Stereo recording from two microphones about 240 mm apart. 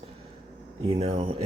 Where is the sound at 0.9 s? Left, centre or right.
Right.